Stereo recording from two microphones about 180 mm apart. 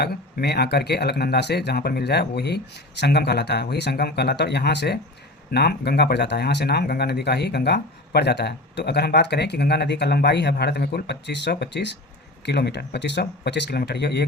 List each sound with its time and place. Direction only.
0.0 s speech: 60° left (ahead or behind)